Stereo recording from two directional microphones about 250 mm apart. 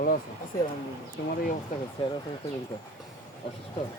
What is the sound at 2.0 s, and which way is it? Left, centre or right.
Speech, left.